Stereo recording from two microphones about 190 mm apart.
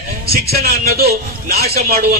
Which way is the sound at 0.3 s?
55° right (ahead or behind).